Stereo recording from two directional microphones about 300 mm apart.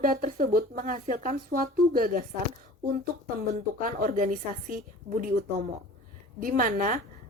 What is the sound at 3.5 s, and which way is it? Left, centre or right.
Speech, right.